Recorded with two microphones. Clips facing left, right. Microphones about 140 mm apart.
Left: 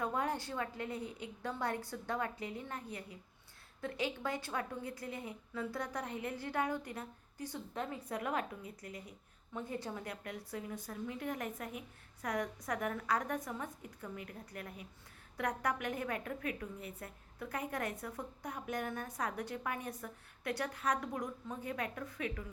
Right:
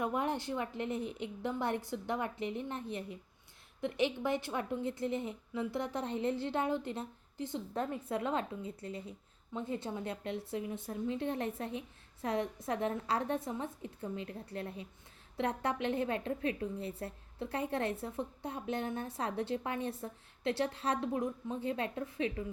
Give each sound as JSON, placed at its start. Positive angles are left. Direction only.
{"t": 0.0, "sound": "a woman's voice", "side_deg": -20}